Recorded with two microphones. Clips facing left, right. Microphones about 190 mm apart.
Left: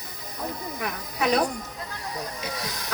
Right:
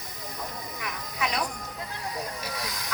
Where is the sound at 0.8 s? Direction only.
35° left (ahead or behind).